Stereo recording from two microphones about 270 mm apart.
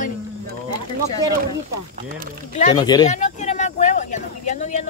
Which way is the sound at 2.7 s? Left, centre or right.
Centre.